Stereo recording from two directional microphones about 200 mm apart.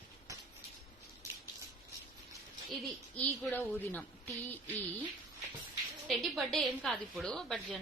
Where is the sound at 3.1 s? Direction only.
5° left (ahead or behind).